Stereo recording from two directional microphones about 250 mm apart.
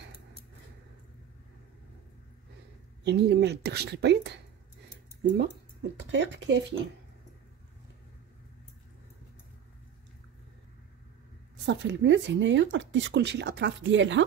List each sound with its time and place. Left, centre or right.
3.0 s speech: right
5.4 s a woman's voice: right
11.6 s a woman's voice: right